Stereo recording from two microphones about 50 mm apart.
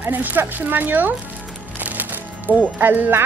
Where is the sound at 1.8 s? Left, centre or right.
Right.